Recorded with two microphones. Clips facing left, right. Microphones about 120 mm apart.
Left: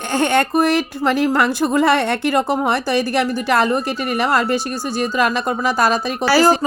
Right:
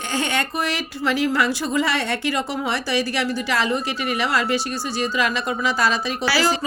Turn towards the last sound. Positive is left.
turn(degrees=45)  # may be behind; listen again after turning